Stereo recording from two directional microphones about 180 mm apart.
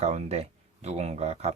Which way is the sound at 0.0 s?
35° right (ahead or behind).